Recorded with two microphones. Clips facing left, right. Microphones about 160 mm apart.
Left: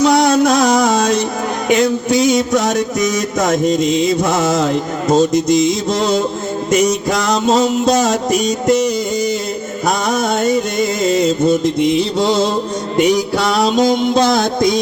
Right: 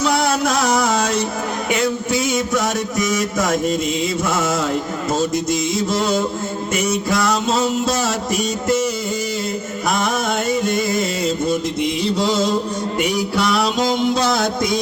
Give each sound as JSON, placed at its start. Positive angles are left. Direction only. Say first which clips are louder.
{"t": 0.0, "sound": "music", "louder": "left 7 dB", "side_deg": 20}
{"t": 7.4, "sound": "music", "louder": "left 6 dB", "side_deg": 20}
{"t": 10.1, "sound": "music", "louder": "left 5 dB", "side_deg": 40}
{"t": 12.2, "sound": "music", "louder": "left 3 dB", "side_deg": 25}